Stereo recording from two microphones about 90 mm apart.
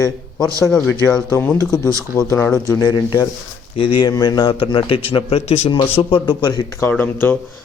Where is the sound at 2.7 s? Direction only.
50° left (ahead or behind).